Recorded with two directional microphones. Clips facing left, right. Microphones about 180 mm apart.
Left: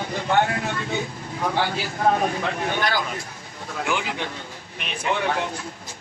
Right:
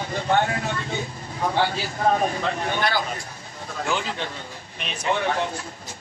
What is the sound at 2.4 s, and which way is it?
Speech, 55° left (ahead or behind).